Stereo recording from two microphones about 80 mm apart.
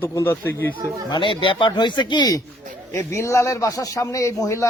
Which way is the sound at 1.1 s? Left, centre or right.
Left.